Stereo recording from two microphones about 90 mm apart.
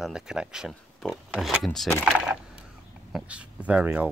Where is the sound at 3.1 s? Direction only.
15° right (ahead or behind).